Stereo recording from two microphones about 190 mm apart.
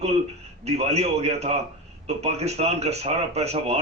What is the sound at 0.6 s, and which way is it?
A man's voice, 35° right (ahead or behind).